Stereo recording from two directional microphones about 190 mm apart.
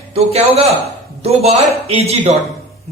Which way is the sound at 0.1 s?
30° right (ahead or behind).